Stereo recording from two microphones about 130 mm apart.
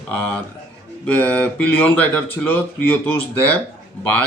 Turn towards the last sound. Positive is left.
turn(degrees=10)  # may be behind; listen again after turning